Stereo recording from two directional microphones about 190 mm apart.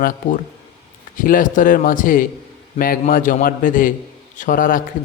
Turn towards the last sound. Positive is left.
turn(degrees=45)  # may be behind; listen again after turning